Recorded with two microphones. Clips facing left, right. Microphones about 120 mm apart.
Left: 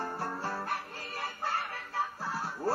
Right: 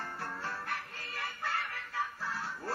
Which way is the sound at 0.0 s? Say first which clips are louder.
Left 5 dB; 35° left (ahead or behind).